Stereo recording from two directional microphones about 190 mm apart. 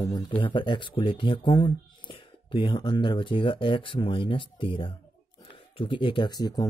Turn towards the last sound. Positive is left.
turn(degrees=20)  # may be behind; listen again after turning